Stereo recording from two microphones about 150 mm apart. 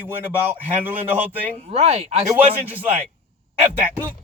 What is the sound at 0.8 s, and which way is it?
Speech, 10° right (ahead or behind).